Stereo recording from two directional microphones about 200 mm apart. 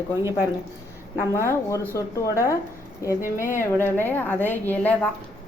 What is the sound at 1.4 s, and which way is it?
A woman's voice, 15° left (ahead or behind).